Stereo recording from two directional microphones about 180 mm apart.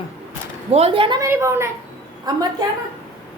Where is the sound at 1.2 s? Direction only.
15° right (ahead or behind).